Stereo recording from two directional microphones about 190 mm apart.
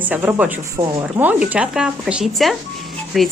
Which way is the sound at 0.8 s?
25° right (ahead or behind).